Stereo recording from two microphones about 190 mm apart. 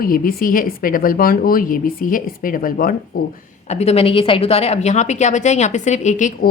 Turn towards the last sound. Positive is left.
turn(degrees=40)  # may be behind; listen again after turning